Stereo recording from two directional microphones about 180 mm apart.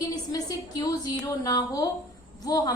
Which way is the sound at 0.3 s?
20° left (ahead or behind).